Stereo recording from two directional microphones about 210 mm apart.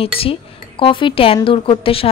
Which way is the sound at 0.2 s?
25° left (ahead or behind).